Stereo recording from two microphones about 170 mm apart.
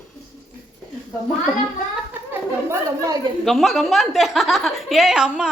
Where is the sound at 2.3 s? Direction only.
15° right (ahead or behind).